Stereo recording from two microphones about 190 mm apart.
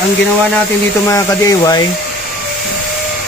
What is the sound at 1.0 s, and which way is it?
Speech, 15° left (ahead or behind).